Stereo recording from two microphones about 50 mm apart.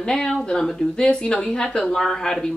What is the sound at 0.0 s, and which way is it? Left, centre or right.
A woman's voice, centre.